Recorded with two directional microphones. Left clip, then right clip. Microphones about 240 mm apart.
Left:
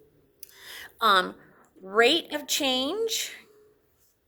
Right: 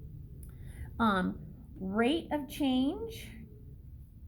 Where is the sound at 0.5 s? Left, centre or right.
Left.